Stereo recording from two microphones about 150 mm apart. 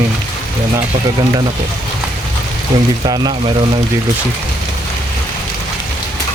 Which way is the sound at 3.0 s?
30° right (ahead or behind).